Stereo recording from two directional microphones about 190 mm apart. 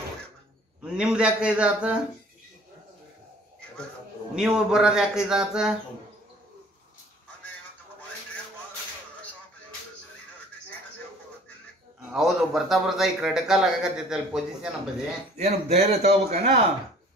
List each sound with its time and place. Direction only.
0.8 s a man's voice: 5° right (ahead or behind)
4.4 s a man's voice: 5° right (ahead or behind)
12.1 s a man's voice: centre (ahead or behind)
15.3 s a man's voice: 35° right (ahead or behind)